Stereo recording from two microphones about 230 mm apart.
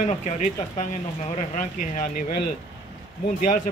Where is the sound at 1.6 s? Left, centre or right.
Left.